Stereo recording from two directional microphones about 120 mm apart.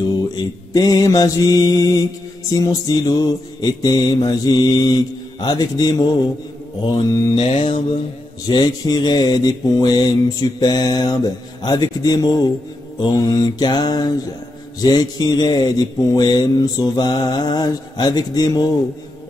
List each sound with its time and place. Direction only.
0.4 s speech: 35° left (ahead or behind)
7.3 s mantra: 55° left (ahead or behind)
8.5 s speech: 35° left (ahead or behind)